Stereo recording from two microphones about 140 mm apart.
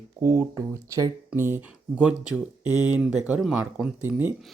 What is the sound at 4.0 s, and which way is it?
Speech, 15° right (ahead or behind).